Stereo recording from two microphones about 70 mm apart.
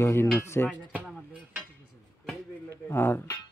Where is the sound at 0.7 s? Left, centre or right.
Centre.